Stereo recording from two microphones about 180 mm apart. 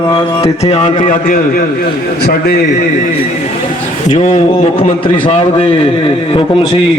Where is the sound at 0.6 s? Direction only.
35° left (ahead or behind); by 1.6 s 50° left (ahead or behind).